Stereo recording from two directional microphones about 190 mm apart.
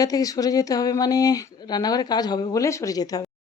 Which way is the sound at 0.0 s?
20° left (ahead or behind).